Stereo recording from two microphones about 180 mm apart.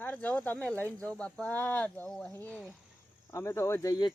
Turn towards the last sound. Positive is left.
turn(degrees=20)  # may be behind; listen again after turning